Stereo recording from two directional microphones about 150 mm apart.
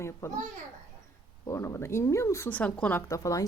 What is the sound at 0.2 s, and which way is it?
Speech, 20° left (ahead or behind).